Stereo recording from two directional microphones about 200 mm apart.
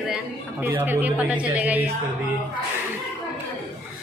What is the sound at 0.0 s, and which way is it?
A woman's voice, 5° right (ahead or behind).